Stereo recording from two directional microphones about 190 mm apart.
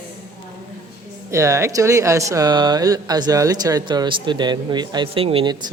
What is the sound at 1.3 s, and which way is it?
Speech, 15° right (ahead or behind).